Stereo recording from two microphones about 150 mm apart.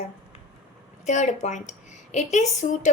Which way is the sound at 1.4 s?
50° left (ahead or behind).